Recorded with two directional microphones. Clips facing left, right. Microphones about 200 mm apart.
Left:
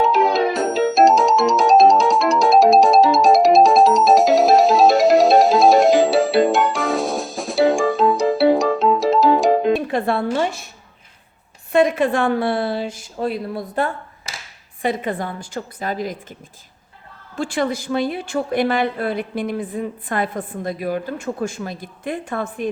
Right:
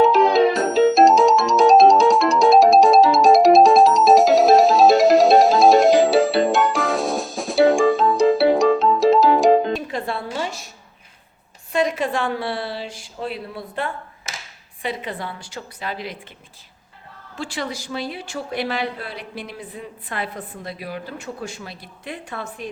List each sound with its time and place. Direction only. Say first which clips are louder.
0.0 s music: right 3 dB; centre (ahead or behind)
9.7 s music: left 6 dB; 60° left (ahead or behind)
11.7 s a woman's voice: left 5 dB; 55° left (ahead or behind)
17.3 s a woman's voice: left 7 dB; 50° left (ahead or behind)